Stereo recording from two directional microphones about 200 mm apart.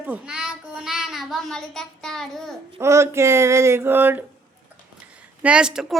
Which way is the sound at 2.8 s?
15° right (ahead or behind).